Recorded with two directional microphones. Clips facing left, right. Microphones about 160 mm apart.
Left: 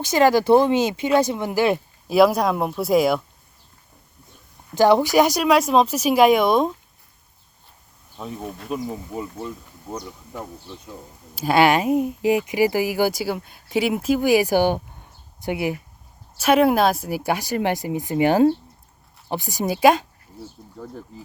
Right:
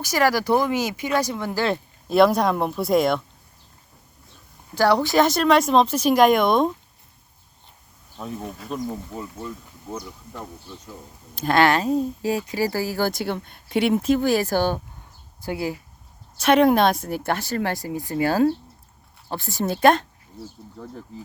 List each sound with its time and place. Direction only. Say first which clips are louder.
0.0 s speech: left 4 dB; 25° left (ahead or behind)
2.0 s speech: left 1 dB; 5° left (ahead or behind)
4.7 s speech: left 3 dB; 20° left (ahead or behind)
8.1 s speech: even; centre (ahead or behind); by 15.8 s 20° left (ahead or behind)
16.4 s speech: even; 5° left (ahead or behind)